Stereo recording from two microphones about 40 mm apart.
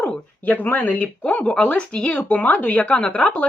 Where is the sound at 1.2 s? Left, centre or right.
Left.